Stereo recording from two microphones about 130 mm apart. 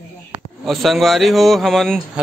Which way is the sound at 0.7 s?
Centre (ahead or behind).